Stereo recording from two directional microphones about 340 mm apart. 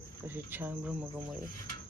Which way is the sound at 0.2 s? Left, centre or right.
Centre.